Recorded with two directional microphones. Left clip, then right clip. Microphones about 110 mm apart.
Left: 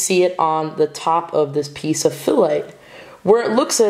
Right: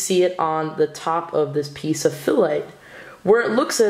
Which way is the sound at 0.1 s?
15° left (ahead or behind).